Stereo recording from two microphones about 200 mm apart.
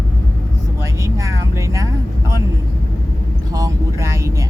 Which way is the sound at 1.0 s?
15° right (ahead or behind).